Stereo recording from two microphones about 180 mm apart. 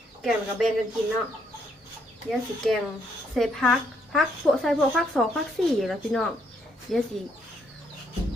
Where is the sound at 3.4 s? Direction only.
Centre (ahead or behind).